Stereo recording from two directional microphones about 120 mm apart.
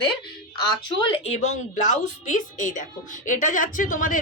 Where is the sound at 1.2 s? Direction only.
65° left (ahead or behind).